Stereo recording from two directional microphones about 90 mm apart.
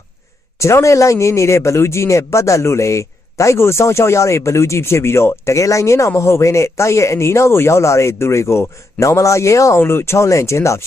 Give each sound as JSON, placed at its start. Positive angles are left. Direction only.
{"t": 0.6, "sound": "speech", "side_deg": 35}